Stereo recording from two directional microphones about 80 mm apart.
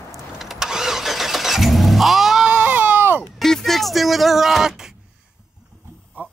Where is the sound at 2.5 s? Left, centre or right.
Centre.